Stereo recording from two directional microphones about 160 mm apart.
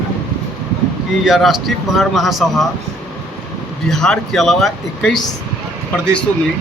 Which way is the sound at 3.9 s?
5° left (ahead or behind).